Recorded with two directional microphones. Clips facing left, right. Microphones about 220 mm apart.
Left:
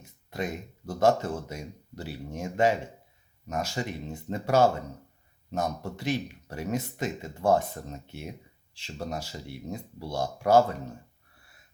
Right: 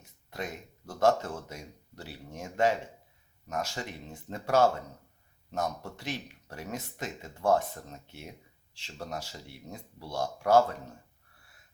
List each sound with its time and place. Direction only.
0.3 s speech: 10° left (ahead or behind)
10.2 s speech: 5° left (ahead or behind)